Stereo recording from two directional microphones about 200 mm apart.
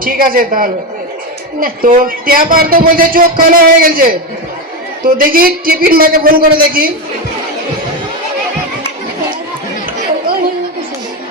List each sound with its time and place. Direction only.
0.0 s a man's voice: 45° right (ahead or behind)